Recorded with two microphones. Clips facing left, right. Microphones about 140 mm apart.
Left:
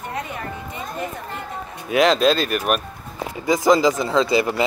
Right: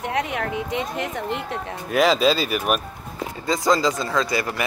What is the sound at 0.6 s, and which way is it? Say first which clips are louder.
Speech: right 4 dB; 90° right.